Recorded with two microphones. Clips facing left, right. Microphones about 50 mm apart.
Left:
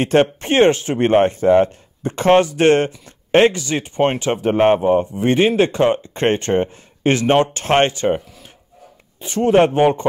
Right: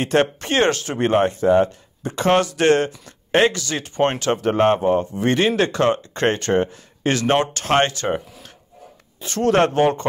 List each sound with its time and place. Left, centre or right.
0.0 s speech: left
3.6 s speech: left
9.2 s speech: centre